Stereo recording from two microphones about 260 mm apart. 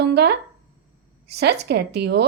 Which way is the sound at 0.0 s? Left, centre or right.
Right.